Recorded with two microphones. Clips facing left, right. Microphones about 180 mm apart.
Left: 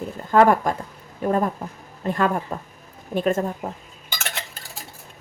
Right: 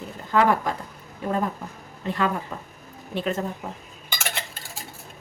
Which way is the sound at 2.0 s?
45° left (ahead or behind).